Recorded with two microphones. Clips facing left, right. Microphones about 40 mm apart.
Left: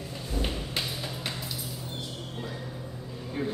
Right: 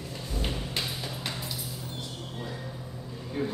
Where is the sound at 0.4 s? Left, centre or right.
Centre.